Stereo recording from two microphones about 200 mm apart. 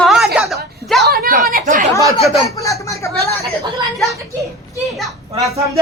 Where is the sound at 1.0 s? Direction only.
50° right (ahead or behind).